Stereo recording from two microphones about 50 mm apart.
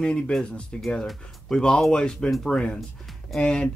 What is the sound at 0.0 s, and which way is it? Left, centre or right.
Speech, centre.